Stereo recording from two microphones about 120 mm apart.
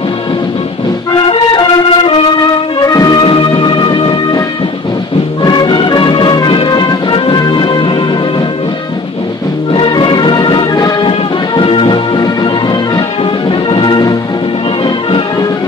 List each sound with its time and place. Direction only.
1.1 s music: 45° left (ahead or behind)
2.9 s music: 30° left (ahead or behind)
3.2 s music: 40° left (ahead or behind)
5.4 s music: 35° left (ahead or behind)
9.8 s music: 40° left (ahead or behind)
11.1 s music: 45° left (ahead or behind)
13.5 s music: 40° left (ahead or behind)